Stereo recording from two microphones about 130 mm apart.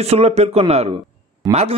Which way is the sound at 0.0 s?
55° right (ahead or behind).